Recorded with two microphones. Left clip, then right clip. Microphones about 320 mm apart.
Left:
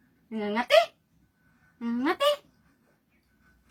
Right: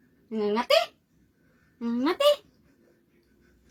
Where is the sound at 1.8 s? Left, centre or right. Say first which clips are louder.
Right 1 dB; centre.